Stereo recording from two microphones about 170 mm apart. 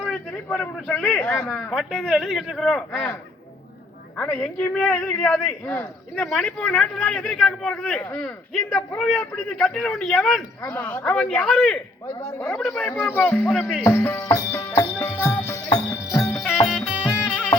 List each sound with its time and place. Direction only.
0.4 s a man's voice: 5° left (ahead or behind)
1.7 s speech: centre (ahead or behind)
4.2 s a man's voice: 5° left (ahead or behind)
10.6 s a man's voice: 10° left (ahead or behind)
13.6 s speech: 5° right (ahead or behind)
13.8 s music: 15° left (ahead or behind)